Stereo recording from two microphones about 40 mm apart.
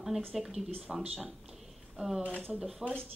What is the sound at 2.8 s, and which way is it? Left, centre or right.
Speech, centre.